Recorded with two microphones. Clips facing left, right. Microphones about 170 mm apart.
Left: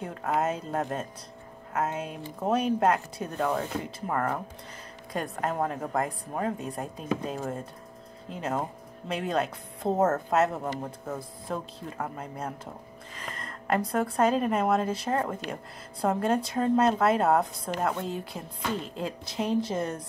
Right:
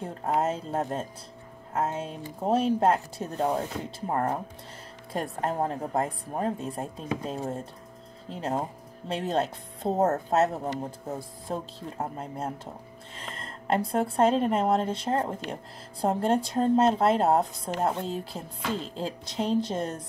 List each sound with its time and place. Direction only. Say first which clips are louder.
0.0 s a woman's voice: right 1 dB; 30° right (ahead or behind)